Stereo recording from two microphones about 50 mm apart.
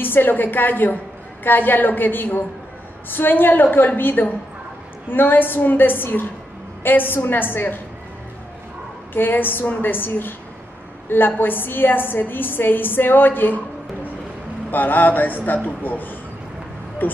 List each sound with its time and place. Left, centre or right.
0.0 s a man's voice: left
9.1 s a woman's voice: left
14.7 s a man's voice: left